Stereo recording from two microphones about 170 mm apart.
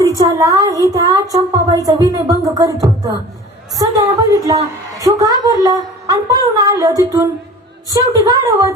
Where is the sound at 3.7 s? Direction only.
20° right (ahead or behind).